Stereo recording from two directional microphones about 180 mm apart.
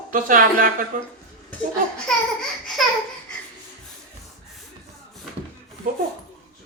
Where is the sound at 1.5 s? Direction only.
5° left (ahead or behind).